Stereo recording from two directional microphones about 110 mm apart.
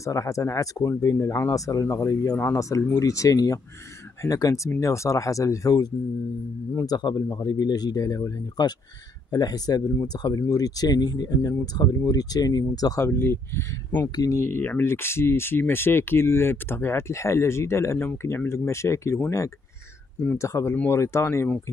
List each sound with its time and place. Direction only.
0.0 s speech: 30° left (ahead or behind)
7.0 s speech: 35° left (ahead or behind)